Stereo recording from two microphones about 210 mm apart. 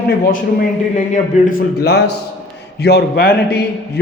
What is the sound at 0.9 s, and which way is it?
Speech, 35° left (ahead or behind).